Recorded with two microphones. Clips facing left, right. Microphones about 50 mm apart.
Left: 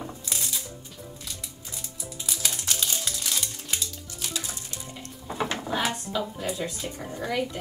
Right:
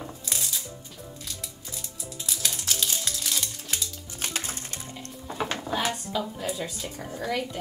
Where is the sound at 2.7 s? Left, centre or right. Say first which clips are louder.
Right 1 dB; centre.